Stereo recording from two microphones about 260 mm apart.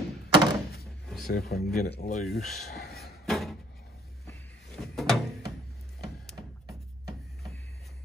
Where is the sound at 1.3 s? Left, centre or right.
Left.